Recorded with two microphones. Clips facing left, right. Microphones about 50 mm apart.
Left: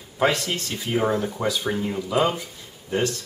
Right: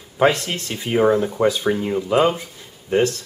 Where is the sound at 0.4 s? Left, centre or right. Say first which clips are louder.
Right 1 dB; centre.